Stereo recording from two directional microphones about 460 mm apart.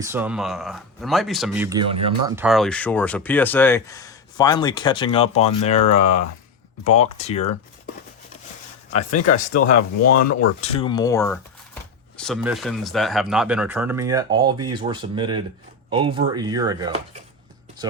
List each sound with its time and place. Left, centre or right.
0.0 s speech: centre
6.8 s speech: centre
9.0 s speech: left
10.6 s speech: centre